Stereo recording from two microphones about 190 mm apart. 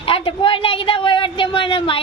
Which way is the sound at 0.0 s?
30° left (ahead or behind).